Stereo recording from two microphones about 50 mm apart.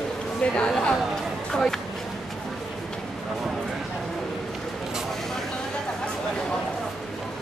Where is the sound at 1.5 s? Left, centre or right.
Centre.